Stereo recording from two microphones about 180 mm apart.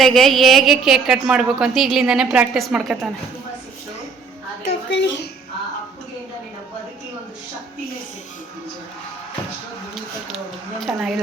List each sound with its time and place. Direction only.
0.0 s a woman's voice: centre (ahead or behind)
4.9 s a woman's voice: 80° left
9.9 s a sound: centre (ahead or behind)